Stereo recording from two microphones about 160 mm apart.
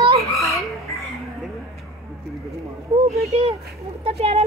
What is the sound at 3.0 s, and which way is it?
Speech, 40° right (ahead or behind).